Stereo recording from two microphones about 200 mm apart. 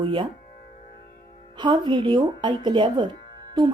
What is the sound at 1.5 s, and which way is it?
Speech, 20° right (ahead or behind).